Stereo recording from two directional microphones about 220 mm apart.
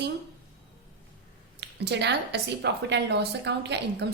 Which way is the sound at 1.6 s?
50° right (ahead or behind).